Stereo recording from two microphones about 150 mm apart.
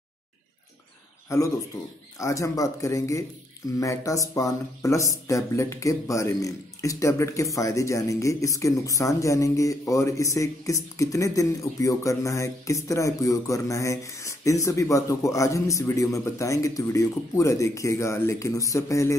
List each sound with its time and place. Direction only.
1.3 s speech: 20° left (ahead or behind)